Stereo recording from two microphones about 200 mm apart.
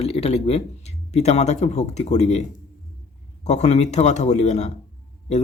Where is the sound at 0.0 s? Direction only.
30° left (ahead or behind).